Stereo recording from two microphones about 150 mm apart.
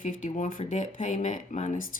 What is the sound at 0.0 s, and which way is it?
Speech, 55° left (ahead or behind).